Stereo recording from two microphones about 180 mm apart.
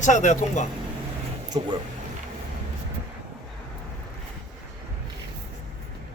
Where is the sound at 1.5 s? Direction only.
25° right (ahead or behind).